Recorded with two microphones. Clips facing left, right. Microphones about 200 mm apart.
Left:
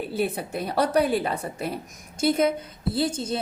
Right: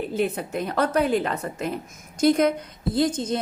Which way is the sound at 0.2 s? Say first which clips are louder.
Right 1 dB; 35° left (ahead or behind).